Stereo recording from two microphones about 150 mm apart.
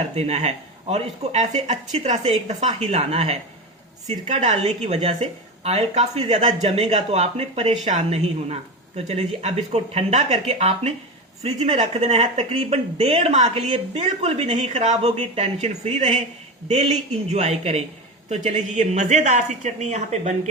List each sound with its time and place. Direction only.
0.1 s a woman's voice: 45° right (ahead or behind)